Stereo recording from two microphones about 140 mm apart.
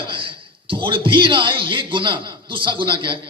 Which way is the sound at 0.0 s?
35° right (ahead or behind).